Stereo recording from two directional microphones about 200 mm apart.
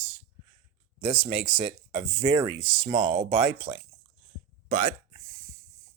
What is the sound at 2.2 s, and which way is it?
Speech, 25° right (ahead or behind).